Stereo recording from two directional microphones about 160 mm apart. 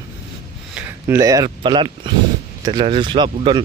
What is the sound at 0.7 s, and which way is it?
Speech, 20° right (ahead or behind).